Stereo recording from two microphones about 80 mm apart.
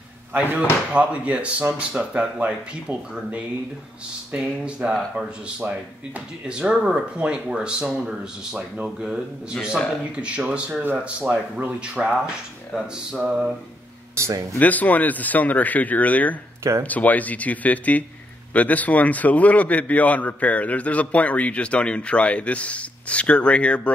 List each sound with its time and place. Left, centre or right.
0.3 s speech: right
6.1 s speech: centre
14.1 s speech: right
14.6 s a man's voice: centre